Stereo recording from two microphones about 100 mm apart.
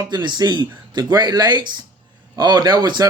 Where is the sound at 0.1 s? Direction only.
50° right (ahead or behind).